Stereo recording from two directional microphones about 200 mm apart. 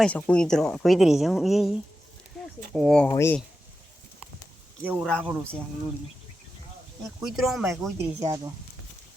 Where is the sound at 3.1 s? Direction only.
15° left (ahead or behind).